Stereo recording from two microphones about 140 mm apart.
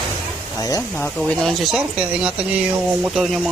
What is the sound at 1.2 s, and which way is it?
Speech, 5° left (ahead or behind).